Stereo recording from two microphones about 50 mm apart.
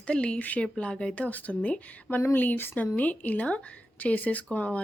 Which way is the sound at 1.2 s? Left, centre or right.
Left.